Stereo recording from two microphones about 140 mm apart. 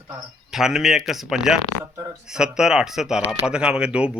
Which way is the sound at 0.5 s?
5° right (ahead or behind).